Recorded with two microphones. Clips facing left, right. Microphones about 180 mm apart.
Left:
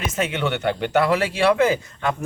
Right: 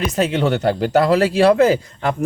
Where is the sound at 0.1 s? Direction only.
35° right (ahead or behind).